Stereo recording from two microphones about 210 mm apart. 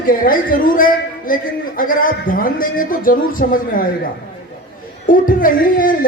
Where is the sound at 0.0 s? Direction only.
40° left (ahead or behind).